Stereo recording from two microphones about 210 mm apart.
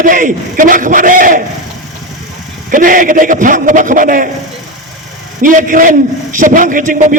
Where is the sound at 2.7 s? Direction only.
40° right (ahead or behind).